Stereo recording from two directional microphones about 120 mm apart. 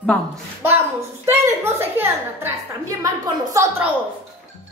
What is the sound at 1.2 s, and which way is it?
A woman's voice, 20° right (ahead or behind).